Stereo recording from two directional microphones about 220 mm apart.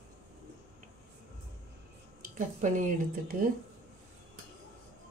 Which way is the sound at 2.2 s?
35° right (ahead or behind).